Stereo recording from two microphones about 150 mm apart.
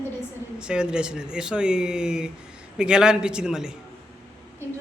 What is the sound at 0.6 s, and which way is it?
Speech, 5° right (ahead or behind).